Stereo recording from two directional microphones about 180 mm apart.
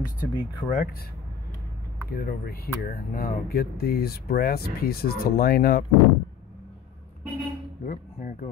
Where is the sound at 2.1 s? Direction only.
55° left (ahead or behind).